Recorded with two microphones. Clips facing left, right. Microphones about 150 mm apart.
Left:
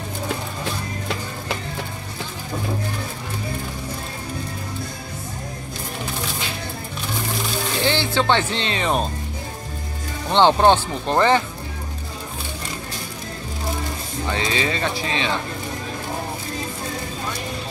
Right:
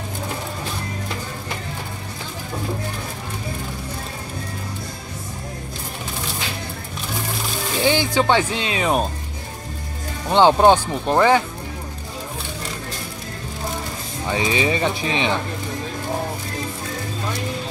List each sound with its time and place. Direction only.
7.8 s speech: 15° right (ahead or behind)
10.3 s speech: 10° right (ahead or behind)
14.3 s speech: 15° right (ahead or behind)